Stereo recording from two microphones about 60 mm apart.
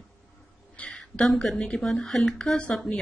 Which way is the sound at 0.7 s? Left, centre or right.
Left.